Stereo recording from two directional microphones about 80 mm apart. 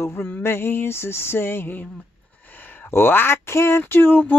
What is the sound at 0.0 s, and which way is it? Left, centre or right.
Speech, left.